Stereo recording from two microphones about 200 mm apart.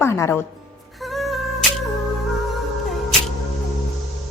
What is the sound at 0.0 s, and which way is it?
Speech, 15° left (ahead or behind).